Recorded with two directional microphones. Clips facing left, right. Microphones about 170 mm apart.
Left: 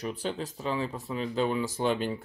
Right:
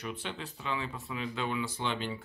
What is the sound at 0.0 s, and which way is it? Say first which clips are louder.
Speech: left 6 dB; 40° left (ahead or behind).